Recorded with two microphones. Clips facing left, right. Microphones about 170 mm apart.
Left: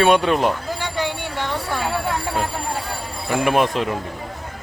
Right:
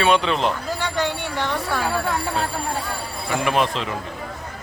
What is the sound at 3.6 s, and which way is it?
Speech, 50° left (ahead or behind).